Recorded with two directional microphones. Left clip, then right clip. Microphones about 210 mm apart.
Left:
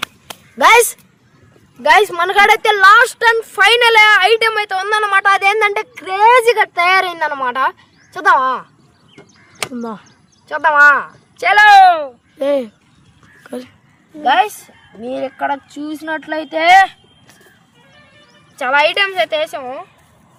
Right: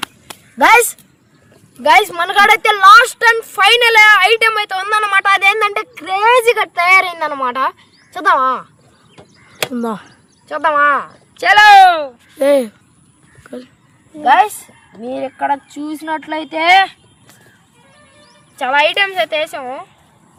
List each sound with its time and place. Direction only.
0.6 s speech: 30° left (ahead or behind)
1.8 s a woman's voice: 5° left (ahead or behind)
9.7 s speech: 25° right (ahead or behind)
10.5 s speech: 5° right (ahead or behind)
11.6 s speech: 20° right (ahead or behind)
12.4 s speech: 25° right (ahead or behind)
13.4 s a sound: 30° left (ahead or behind)
14.2 s a woman's voice: 5° right (ahead or behind)
18.6 s a woman's voice: centre (ahead or behind)